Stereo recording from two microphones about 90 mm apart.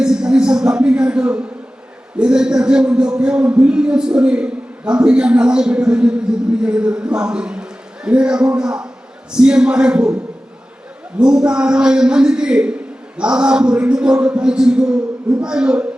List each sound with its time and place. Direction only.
0.0 s a man's voice: 10° right (ahead or behind)
11.2 s a man's voice: 10° right (ahead or behind)